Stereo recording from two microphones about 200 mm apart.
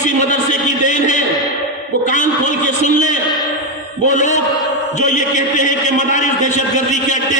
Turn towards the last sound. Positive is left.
turn(degrees=40)  # may be behind; listen again after turning